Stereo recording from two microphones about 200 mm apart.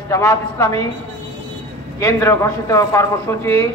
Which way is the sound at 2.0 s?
15° left (ahead or behind).